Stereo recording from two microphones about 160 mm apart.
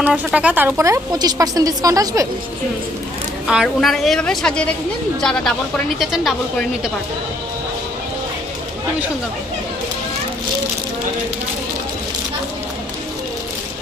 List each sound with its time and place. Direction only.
0.0 s a woman's voice: 5° right (ahead or behind)
3.4 s a woman's voice: centre (ahead or behind)